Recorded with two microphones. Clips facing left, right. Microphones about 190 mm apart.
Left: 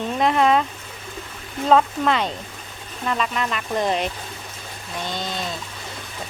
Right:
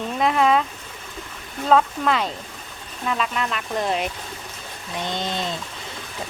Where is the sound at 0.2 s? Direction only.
Centre (ahead or behind).